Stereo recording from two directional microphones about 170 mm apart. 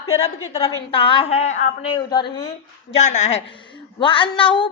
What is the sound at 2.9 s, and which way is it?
Speech, 45° left (ahead or behind).